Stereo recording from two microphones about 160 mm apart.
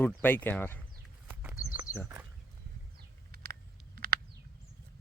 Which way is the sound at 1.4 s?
10° right (ahead or behind).